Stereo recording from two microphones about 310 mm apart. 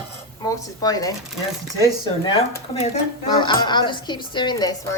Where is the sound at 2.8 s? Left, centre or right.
Centre.